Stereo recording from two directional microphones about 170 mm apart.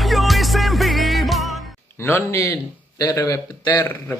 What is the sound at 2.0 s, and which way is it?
A man's voice, 15° left (ahead or behind).